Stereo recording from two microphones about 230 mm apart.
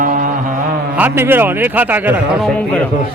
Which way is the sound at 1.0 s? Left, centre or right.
Centre.